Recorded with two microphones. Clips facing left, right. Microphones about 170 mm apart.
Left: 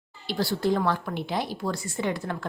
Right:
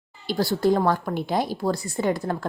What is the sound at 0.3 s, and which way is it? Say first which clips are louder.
A woman's voice: right 4 dB; 40° right (ahead or behind).